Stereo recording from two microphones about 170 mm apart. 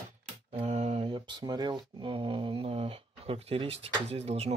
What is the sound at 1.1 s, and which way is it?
Speech, 25° right (ahead or behind).